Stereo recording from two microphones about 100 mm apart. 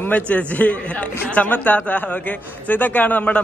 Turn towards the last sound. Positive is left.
turn(degrees=15)  # may be behind; listen again after turning